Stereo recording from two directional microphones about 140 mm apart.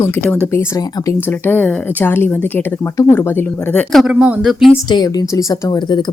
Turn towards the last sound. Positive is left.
turn(degrees=30)  # may be behind; listen again after turning